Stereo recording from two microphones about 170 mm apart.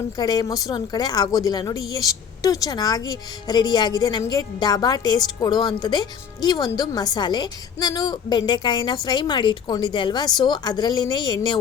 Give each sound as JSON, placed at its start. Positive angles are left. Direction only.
{"t": 0.2, "sound": "a woman's voice", "side_deg": 25}